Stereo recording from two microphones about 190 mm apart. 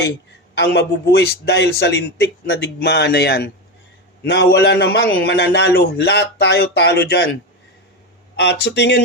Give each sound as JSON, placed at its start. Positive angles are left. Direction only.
{"t": 0.5, "sound": "a man's voice", "side_deg": 65}
{"t": 8.4, "sound": "a man's voice", "side_deg": 65}